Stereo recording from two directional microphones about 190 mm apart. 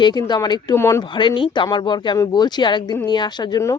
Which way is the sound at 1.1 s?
25° left (ahead or behind).